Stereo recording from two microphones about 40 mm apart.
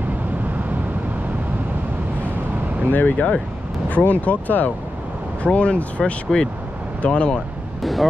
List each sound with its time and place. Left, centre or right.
2.9 s speech: left
5.4 s speech: left
7.8 s speech: centre